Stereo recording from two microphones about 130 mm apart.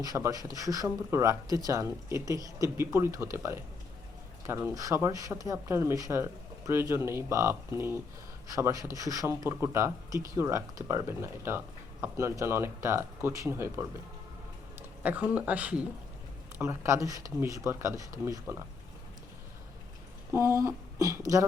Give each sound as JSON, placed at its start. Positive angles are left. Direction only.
{"t": 0.0, "sound": "speech", "side_deg": -25}
{"t": 16.6, "sound": "speech", "side_deg": -20}
{"t": 20.6, "sound": "speech", "side_deg": -25}